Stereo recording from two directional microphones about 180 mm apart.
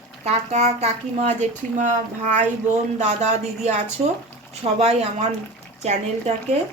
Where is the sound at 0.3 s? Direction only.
35° right (ahead or behind).